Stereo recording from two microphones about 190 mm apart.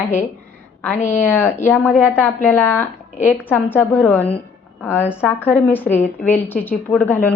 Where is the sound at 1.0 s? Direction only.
40° left (ahead or behind).